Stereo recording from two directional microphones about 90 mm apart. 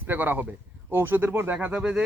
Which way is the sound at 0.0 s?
20° right (ahead or behind).